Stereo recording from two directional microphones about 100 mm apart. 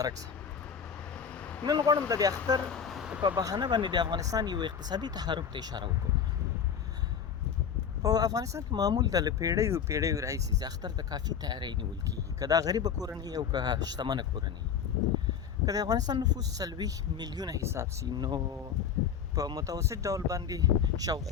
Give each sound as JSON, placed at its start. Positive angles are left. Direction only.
{"t": 0.0, "sound": "speech", "side_deg": -35}
{"t": 1.1, "sound": "vehicle", "side_deg": 10}
{"t": 1.9, "sound": "speech", "side_deg": -35}
{"t": 2.6, "sound": "a sound", "side_deg": 10}
{"t": 3.2, "sound": "speech", "side_deg": -40}
{"t": 8.0, "sound": "speech", "side_deg": -40}
{"t": 15.6, "sound": "speech", "side_deg": -40}
{"t": 17.6, "sound": "speech", "side_deg": -30}
{"t": 18.1, "sound": "speech", "side_deg": -45}